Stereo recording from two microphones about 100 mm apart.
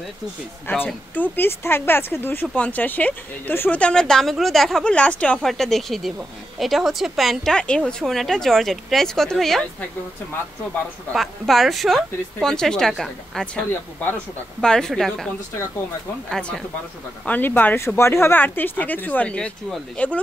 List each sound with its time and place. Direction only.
0.7 s a woman's voice: 20° left (ahead or behind)
3.8 s a woman's voice: 10° left (ahead or behind)
11.1 s a woman's voice: centre (ahead or behind)
16.3 s a woman's voice: 5° left (ahead or behind)
17.3 s speech: 20° left (ahead or behind)